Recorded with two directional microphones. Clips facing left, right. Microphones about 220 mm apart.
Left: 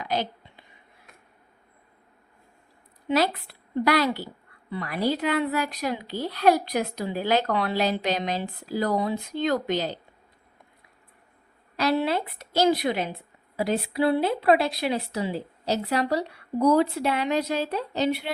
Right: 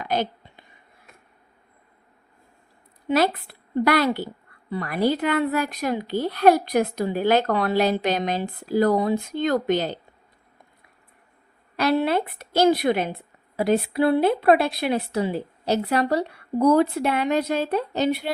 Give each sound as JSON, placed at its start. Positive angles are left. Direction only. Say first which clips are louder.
{"t": 0.0, "sound": "a sound", "louder": "right 3 dB", "side_deg": -50}
{"t": 3.1, "sound": "speech", "louder": "right 3 dB", "side_deg": -55}
{"t": 11.8, "sound": "a woman's voice", "louder": "right 3 dB", "side_deg": -55}